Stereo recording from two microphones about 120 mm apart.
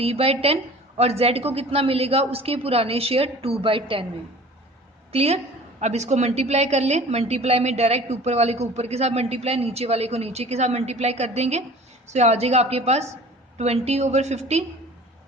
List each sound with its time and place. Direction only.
0.0 s a woman's voice: 55° right (ahead or behind)
5.1 s a woman's voice: 55° right (ahead or behind)
5.8 s a woman's voice: 70° right (ahead or behind)